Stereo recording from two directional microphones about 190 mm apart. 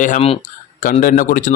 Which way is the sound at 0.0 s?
40° left (ahead or behind).